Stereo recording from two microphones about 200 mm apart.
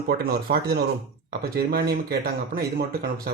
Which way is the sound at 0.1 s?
50° right (ahead or behind).